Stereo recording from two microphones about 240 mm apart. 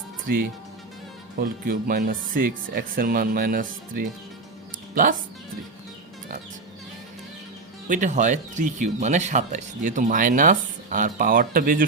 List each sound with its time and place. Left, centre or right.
1.4 s speech: right
7.9 s speech: right